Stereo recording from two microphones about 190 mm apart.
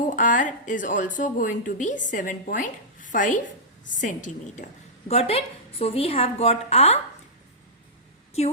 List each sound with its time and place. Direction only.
0.2 s a woman's voice: 40° left (ahead or behind)